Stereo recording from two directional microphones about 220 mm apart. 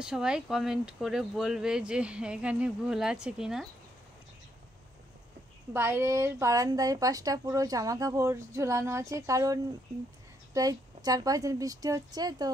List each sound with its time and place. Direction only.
0.0 s speech: 5° right (ahead or behind)
5.7 s speech: 10° right (ahead or behind)